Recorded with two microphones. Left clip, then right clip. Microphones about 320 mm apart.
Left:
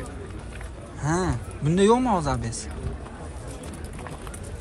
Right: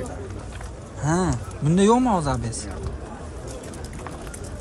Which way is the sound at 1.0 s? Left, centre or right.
Centre.